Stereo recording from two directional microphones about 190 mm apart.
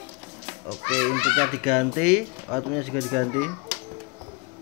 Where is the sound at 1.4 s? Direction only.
Centre (ahead or behind).